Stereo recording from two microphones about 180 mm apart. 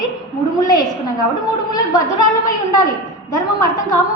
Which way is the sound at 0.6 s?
20° left (ahead or behind).